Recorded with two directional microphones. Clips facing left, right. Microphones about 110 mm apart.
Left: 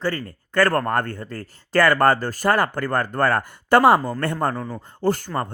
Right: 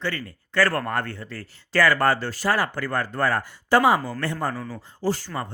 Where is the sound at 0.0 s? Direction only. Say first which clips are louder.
Left 4 dB; 40° left (ahead or behind).